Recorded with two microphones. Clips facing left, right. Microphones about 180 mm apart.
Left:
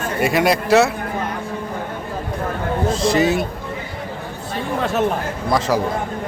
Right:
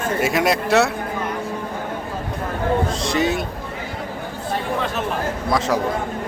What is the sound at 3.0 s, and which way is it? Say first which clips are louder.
Speech: left 4 dB; centre (ahead or behind).